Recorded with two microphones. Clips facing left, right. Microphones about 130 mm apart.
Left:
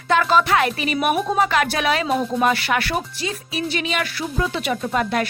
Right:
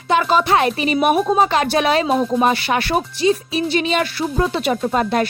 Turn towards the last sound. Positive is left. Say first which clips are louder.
# right 3 dB
turn(degrees=-30)  # may be behind; listen again after turning